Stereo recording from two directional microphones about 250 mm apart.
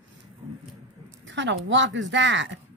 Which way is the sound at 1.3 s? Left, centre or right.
Right.